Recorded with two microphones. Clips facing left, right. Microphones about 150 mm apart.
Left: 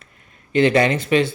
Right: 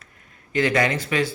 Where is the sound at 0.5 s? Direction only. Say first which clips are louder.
Left 5 dB; 25° left (ahead or behind).